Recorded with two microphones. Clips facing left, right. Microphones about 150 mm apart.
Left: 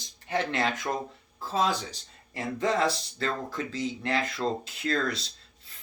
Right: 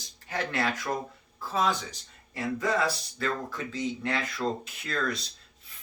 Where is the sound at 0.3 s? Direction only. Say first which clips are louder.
Left 2 dB; 20° left (ahead or behind).